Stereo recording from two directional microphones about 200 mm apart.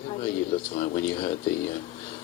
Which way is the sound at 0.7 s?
30° left (ahead or behind).